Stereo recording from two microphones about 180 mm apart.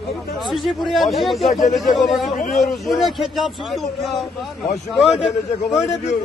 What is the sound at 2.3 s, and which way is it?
Speech, 45° left (ahead or behind).